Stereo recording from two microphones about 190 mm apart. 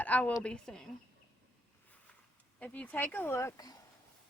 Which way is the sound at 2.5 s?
5° left (ahead or behind).